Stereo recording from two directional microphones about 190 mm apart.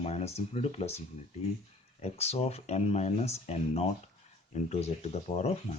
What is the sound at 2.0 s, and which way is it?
Speech, 35° left (ahead or behind).